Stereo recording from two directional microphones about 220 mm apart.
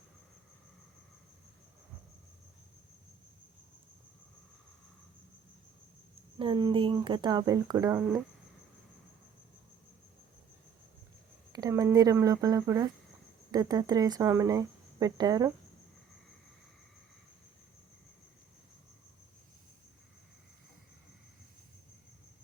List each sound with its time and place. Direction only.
6.4 s speech: 20° right (ahead or behind)
11.5 s speech: 15° right (ahead or behind)